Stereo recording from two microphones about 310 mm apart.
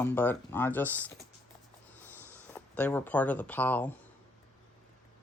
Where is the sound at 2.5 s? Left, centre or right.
Centre.